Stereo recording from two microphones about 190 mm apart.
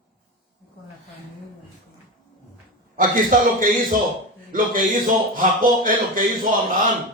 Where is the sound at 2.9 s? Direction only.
45° right (ahead or behind).